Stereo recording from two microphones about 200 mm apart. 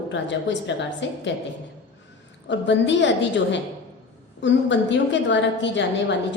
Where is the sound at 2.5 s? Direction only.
65° left (ahead or behind).